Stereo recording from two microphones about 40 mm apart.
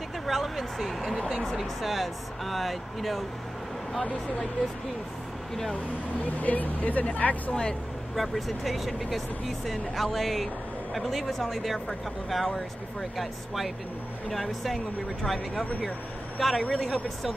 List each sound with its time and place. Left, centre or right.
0.3 s a sound: centre
1.3 s speech: centre
1.6 s speech: centre
6.2 s speech: left
8.2 s speech: centre
14.3 s a man's voice: centre